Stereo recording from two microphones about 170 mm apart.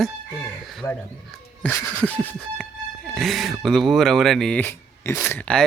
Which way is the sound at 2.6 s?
Centre (ahead or behind).